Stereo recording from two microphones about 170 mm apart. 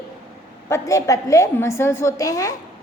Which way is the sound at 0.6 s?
20° left (ahead or behind).